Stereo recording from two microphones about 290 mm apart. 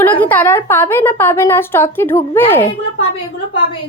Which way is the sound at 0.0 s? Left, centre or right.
Centre.